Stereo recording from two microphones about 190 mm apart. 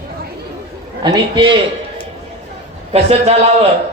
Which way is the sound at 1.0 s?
25° right (ahead or behind).